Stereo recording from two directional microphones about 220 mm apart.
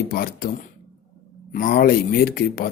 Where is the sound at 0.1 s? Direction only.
40° left (ahead or behind).